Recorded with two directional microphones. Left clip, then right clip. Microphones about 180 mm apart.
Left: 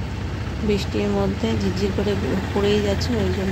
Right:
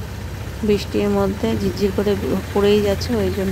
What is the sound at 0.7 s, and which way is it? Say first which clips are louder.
Speech: right 4 dB; 45° right (ahead or behind).